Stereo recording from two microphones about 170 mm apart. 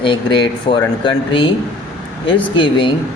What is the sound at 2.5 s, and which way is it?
Speech, 30° left (ahead or behind).